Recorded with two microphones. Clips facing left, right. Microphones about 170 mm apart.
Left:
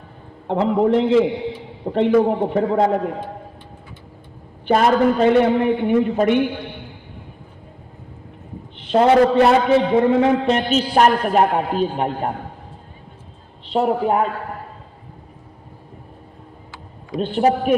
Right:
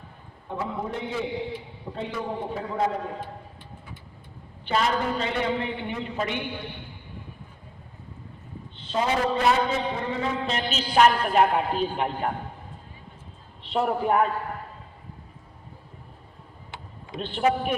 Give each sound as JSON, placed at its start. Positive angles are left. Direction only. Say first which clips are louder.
{"t": 0.4, "sound": "a man's voice", "louder": "left 14 dB", "side_deg": 80}
{"t": 1.8, "sound": "a man's voice", "louder": "left 18 dB", "side_deg": 75}
{"t": 4.6, "sound": "a man's voice", "louder": "left 10 dB", "side_deg": 50}
{"t": 8.9, "sound": "a man's voice", "louder": "left 11 dB", "side_deg": 65}
{"t": 13.7, "sound": "speech", "louder": "left 5 dB", "side_deg": 35}
{"t": 17.2, "sound": "a man's voice", "louder": "left 7 dB", "side_deg": 45}